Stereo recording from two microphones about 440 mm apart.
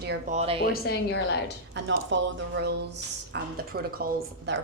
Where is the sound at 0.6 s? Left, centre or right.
Left.